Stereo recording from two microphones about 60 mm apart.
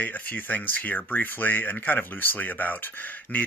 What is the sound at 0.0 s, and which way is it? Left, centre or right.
Speech, left.